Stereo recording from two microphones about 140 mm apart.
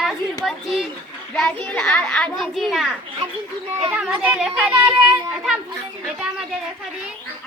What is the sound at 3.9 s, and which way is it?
A child's voice, 5° right (ahead or behind).